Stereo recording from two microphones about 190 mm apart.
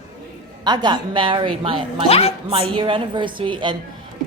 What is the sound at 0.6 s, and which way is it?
A woman's voice, 25° right (ahead or behind).